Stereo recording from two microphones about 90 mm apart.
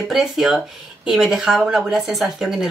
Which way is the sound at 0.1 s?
5° right (ahead or behind).